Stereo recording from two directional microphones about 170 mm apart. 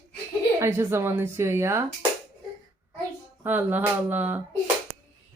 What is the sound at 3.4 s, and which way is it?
Speech, 10° right (ahead or behind).